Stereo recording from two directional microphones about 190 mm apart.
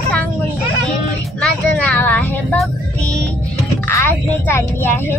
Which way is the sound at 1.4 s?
5° left (ahead or behind).